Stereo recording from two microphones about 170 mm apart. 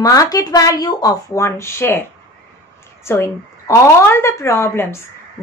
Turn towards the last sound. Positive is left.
turn(degrees=15)  # may be behind; listen again after turning